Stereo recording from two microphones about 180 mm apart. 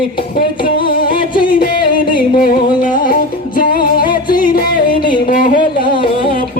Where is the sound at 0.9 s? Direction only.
55° left (ahead or behind).